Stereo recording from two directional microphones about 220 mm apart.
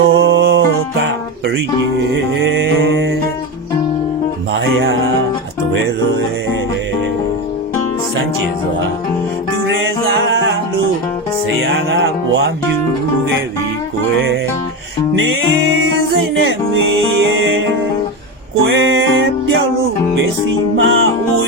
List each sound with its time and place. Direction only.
0.0 s music: 60° right (ahead or behind)
2.0 s music: 55° right (ahead or behind)
9.6 s music: 60° right (ahead or behind)
11.6 s music: 60° right (ahead or behind)
16.4 s music: 60° right (ahead or behind)
18.6 s music: 60° right (ahead or behind)
20.7 s music: 60° right (ahead or behind)